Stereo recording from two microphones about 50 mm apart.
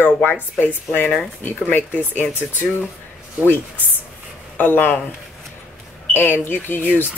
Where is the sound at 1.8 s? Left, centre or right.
Left.